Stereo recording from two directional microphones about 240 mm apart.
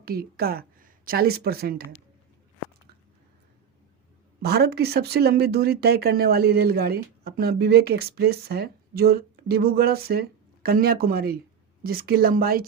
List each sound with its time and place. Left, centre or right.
0.0 s a woman's voice: right
4.4 s speech: right